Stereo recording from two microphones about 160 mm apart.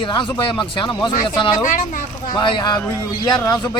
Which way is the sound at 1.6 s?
55° left (ahead or behind).